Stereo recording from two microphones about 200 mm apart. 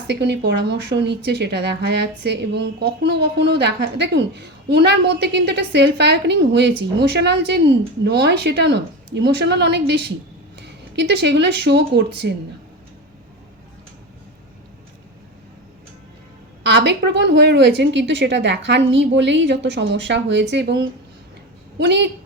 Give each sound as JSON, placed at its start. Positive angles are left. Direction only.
{"t": 0.1, "sound": "speech", "side_deg": -55}
{"t": 16.6, "sound": "speech", "side_deg": -60}
{"t": 21.8, "sound": "speech", "side_deg": -60}